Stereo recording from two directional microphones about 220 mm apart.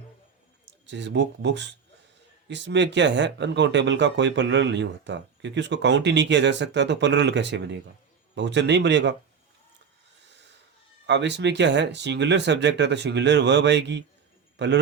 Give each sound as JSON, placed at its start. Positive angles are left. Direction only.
{"t": 0.6, "sound": "speech", "side_deg": -55}
{"t": 11.0, "sound": "a man's voice", "side_deg": -50}